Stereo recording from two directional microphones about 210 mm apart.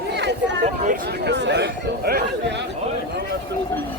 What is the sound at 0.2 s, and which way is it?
Chatter, 55° right (ahead or behind).